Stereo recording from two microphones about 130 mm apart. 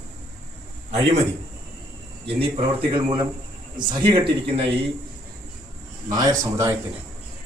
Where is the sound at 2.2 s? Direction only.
45° right (ahead or behind).